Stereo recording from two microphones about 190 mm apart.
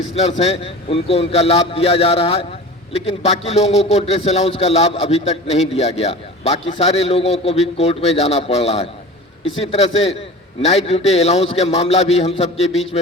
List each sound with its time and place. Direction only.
0.2 s a man's voice: 35° left (ahead or behind)